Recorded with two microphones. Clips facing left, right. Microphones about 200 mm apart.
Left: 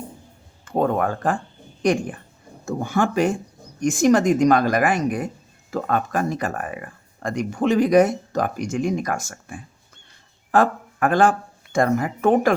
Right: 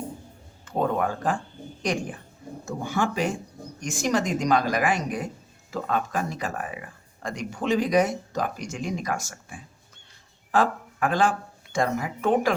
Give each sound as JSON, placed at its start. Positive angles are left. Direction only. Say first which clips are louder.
{"t": 0.6, "sound": "speech", "louder": "left 4 dB", "side_deg": 50}